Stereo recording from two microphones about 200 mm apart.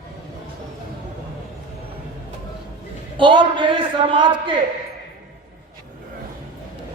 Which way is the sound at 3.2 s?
25° right (ahead or behind).